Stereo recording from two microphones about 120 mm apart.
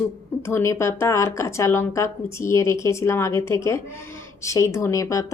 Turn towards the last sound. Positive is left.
turn(degrees=25)  # may be behind; listen again after turning